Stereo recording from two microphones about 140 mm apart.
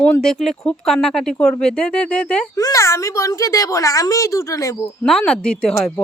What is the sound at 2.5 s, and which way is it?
A woman's voice, 20° left (ahead or behind).